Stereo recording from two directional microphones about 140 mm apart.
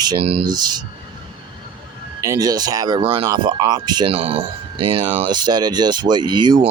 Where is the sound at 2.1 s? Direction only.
25° right (ahead or behind).